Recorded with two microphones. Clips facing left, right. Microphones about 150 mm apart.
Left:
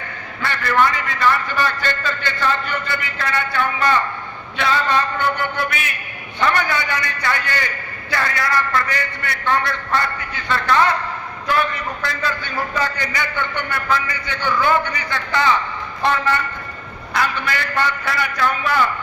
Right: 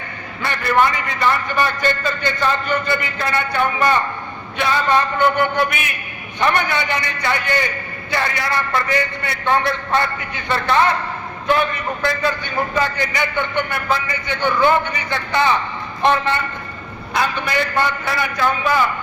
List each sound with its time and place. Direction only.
0.4 s a man's voice: 20° right (ahead or behind)